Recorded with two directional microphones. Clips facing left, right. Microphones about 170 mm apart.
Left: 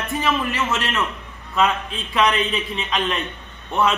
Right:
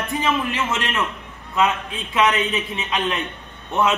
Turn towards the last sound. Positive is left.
turn(degrees=-15)  # may be behind; listen again after turning